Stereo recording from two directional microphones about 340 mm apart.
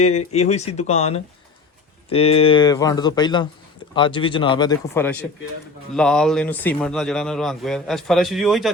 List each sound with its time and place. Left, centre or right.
0.3 s speech: centre